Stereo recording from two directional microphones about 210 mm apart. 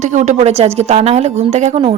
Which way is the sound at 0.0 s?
35° right (ahead or behind).